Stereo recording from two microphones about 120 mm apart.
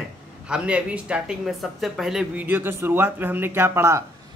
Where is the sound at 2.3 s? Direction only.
15° right (ahead or behind).